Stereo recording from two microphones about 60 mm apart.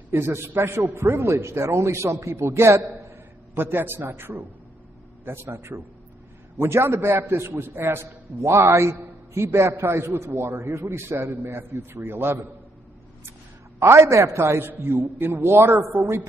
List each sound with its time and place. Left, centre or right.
0.1 s a man's voice: right
3.6 s a man's voice: right
13.7 s a man's voice: right